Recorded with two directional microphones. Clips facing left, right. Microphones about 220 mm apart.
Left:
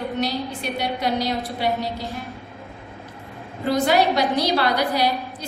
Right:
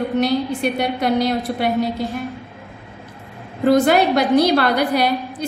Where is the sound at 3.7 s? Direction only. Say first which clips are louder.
Right 5 dB; 50° right (ahead or behind).